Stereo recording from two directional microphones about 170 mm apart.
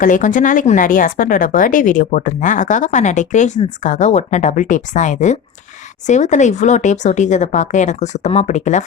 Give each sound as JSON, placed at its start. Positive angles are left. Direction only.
{"t": 0.0, "sound": "speech", "side_deg": 50}